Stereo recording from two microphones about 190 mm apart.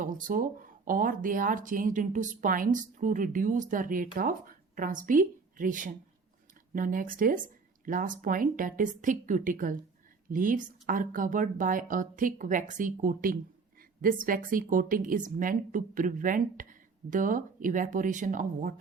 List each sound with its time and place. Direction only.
0.0 s speech: 45° right (ahead or behind)